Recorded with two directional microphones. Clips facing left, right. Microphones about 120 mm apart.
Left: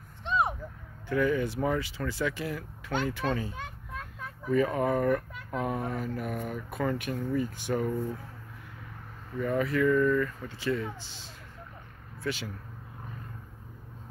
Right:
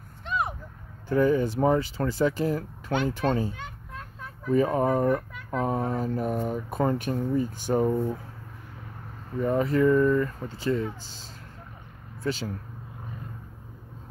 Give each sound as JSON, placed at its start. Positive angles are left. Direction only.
{"t": 0.2, "sound": "vehicle", "side_deg": 25}
{"t": 1.0, "sound": "speech", "side_deg": -35}
{"t": 9.4, "sound": "speech", "side_deg": -30}